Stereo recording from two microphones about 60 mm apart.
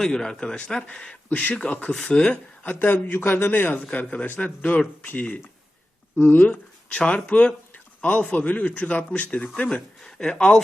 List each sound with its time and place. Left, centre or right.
0.0 s speech: centre
2.6 s a man's voice: left
10.0 s speech: centre